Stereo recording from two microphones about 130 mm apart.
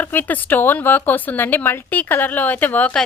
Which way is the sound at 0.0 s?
15° left (ahead or behind).